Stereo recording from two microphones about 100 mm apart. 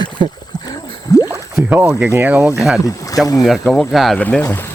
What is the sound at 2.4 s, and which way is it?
Speech, 5° right (ahead or behind).